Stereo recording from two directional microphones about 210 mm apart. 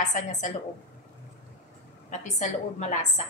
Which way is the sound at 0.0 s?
35° left (ahead or behind).